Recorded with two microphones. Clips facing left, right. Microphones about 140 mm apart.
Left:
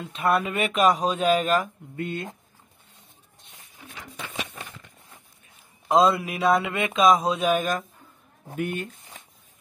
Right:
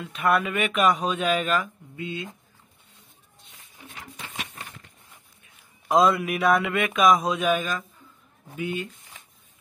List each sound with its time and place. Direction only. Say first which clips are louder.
0.0 s speech: even; 30° left (ahead or behind)
2.0 s speech: left 2 dB; 50° left (ahead or behind)
5.9 s speech: even; 30° left (ahead or behind); by 7.8 s 45° left (ahead or behind)
8.5 s speech: left 1 dB; 55° left (ahead or behind)